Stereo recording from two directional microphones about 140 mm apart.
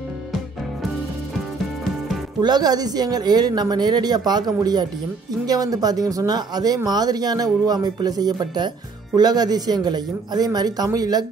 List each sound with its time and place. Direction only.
2.4 s speech: 30° right (ahead or behind)